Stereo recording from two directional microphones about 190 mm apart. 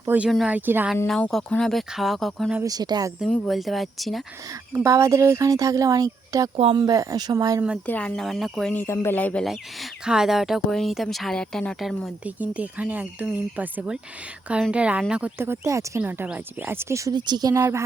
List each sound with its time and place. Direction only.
0.0 s speech: 10° right (ahead or behind)
1.0 s speech: centre (ahead or behind)
2.6 s speech: 20° right (ahead or behind)
3.2 s speech: centre (ahead or behind)
4.7 s speech: 15° right (ahead or behind)
7.9 s speech: 5° left (ahead or behind); by 17.8 s 15° right (ahead or behind)